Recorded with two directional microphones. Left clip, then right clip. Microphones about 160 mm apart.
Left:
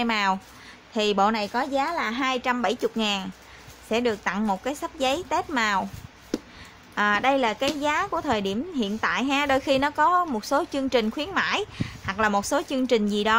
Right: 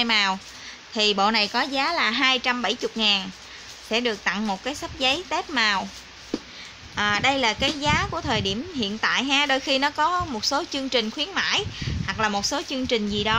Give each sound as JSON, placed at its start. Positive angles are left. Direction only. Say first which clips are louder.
{"t": 0.0, "sound": "speech", "louder": "right 2 dB", "side_deg": 20}
{"t": 2.2, "sound": "speech", "louder": "right 3 dB", "side_deg": 15}
{"t": 7.0, "sound": "speech", "louder": "even", "side_deg": 25}